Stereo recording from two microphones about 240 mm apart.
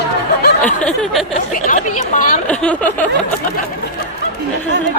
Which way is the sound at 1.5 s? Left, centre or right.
Left.